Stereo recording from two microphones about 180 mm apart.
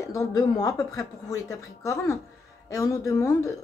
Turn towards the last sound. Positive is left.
turn(degrees=20)  # may be behind; listen again after turning